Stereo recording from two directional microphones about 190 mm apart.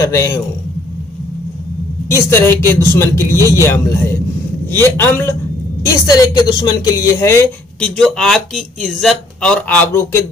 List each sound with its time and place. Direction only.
0.0 s speech: 15° left (ahead or behind)
2.0 s speech: 15° left (ahead or behind)
7.8 s speech: 5° left (ahead or behind)